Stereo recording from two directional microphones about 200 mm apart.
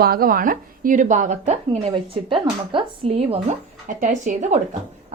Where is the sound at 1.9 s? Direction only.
25° right (ahead or behind).